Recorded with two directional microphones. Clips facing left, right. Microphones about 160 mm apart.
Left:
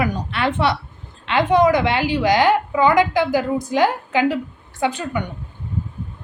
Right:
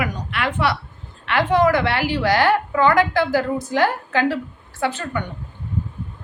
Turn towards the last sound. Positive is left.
turn(degrees=15)  # may be behind; listen again after turning